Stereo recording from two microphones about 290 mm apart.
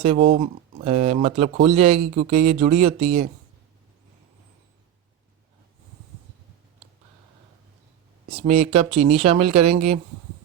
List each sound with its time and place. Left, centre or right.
0.0 s speech: right
8.3 s speech: centre